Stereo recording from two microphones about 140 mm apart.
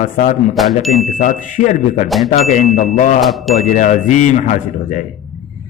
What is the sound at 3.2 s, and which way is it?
Speech, centre (ahead or behind).